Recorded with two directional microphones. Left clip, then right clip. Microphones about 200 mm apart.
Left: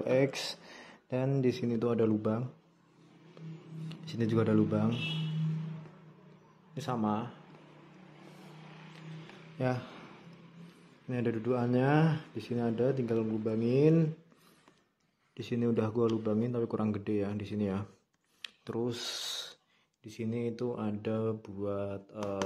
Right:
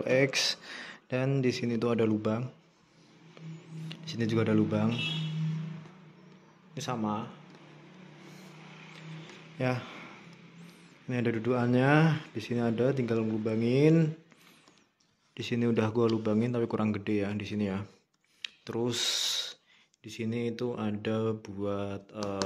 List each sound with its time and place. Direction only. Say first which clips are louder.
0.0 s speech: right 3 dB; 5° left (ahead or behind)
3.9 s speech: right 1 dB; 5° left (ahead or behind)
6.7 s a sound: right 1 dB; 5° left (ahead or behind)
7.0 s speech: left 2 dB; 20° left (ahead or behind)
9.6 s speech: right 2 dB; centre (ahead or behind)
11.1 s speech: right 2 dB; 5° right (ahead or behind)
15.3 s speech: right 2 dB; centre (ahead or behind)
18.4 s a sound: right 3 dB; 10° left (ahead or behind)
18.8 s speech: right 6 dB; 5° right (ahead or behind)